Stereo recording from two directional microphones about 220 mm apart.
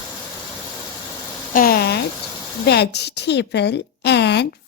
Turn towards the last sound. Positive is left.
turn(degrees=50)  # may be behind; listen again after turning